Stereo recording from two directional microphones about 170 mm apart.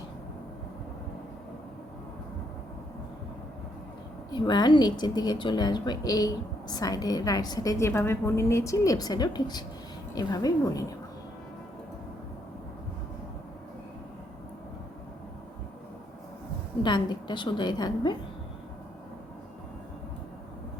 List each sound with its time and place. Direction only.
4.3 s speech: 25° left (ahead or behind)
16.8 s speech: 25° left (ahead or behind)